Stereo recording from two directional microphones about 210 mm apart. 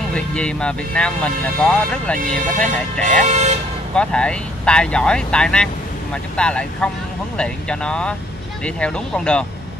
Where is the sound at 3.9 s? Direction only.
5° left (ahead or behind).